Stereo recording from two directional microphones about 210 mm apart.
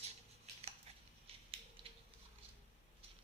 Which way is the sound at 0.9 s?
30° right (ahead or behind).